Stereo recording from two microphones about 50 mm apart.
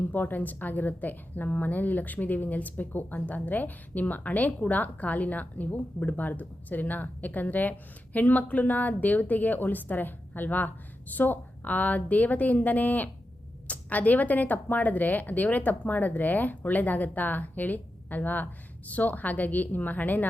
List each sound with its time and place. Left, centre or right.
0.1 s a woman's voice: left